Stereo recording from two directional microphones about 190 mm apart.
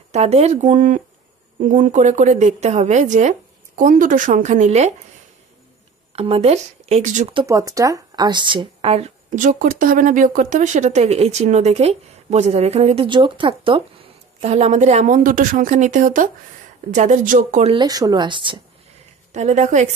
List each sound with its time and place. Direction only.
0.1 s a woman's voice: 35° right (ahead or behind)
6.1 s a woman's voice: 30° right (ahead or behind)
7.3 s a woman's voice: 15° right (ahead or behind); by 17.7 s 40° right (ahead or behind)
17.7 s a woman's voice: 20° right (ahead or behind)
19.3 s a woman's voice: 40° right (ahead or behind)